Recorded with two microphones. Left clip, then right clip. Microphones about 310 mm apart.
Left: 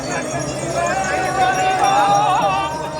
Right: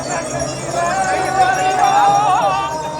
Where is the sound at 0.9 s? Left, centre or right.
Right.